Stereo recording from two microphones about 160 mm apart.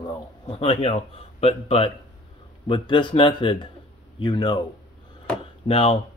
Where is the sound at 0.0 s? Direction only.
35° left (ahead or behind).